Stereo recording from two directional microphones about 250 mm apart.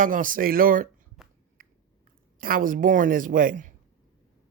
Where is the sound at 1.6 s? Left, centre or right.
Right.